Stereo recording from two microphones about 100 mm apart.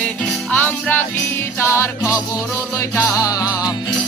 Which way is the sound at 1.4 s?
25° left (ahead or behind).